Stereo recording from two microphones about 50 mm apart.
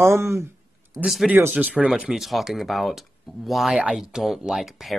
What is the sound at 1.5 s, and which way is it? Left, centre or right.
Speech, right.